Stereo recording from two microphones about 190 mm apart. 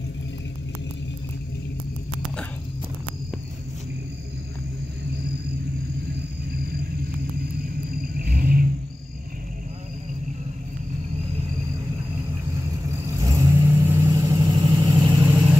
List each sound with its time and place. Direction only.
8.2 s vehicle: 50° right (ahead or behind)
12.9 s vehicle: 20° right (ahead or behind)